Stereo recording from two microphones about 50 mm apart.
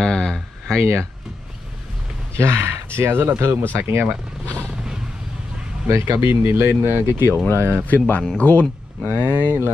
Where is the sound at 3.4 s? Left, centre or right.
Right.